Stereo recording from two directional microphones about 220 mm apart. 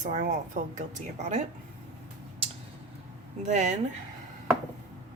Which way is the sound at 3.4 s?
30° right (ahead or behind).